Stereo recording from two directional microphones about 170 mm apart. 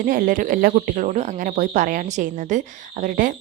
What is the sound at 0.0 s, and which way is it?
Speech, 55° right (ahead or behind).